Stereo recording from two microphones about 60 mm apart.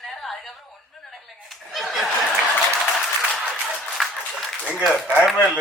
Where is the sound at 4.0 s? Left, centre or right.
Centre.